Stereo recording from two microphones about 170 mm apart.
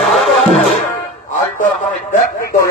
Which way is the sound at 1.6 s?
50° left (ahead or behind).